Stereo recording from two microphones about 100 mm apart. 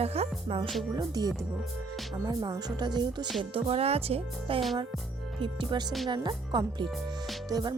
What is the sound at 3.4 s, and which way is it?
Speech, 65° right (ahead or behind).